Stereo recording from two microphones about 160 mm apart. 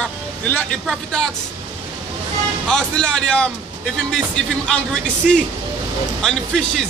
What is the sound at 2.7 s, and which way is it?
Speech, 5° left (ahead or behind).